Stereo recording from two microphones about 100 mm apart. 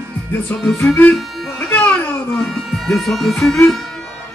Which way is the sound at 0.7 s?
20° left (ahead or behind).